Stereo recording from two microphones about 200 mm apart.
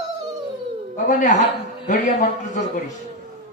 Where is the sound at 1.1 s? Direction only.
35° left (ahead or behind).